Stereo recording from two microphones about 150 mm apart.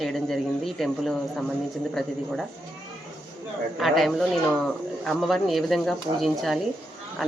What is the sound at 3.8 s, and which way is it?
Speech, centre (ahead or behind).